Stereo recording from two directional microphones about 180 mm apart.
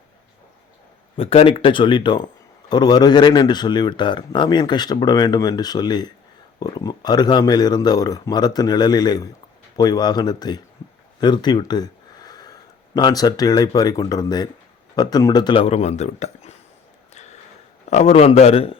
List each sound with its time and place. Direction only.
1.1 s speech: 30° left (ahead or behind)
17.9 s speech: 35° left (ahead or behind)